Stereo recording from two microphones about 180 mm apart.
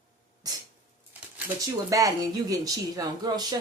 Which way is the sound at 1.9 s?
20° right (ahead or behind).